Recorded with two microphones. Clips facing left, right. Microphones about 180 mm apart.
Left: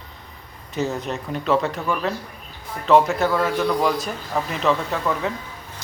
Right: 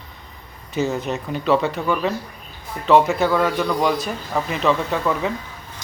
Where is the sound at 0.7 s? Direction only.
Centre (ahead or behind).